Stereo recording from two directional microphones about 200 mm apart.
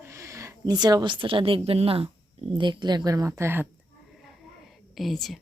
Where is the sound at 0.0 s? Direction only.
15° right (ahead or behind).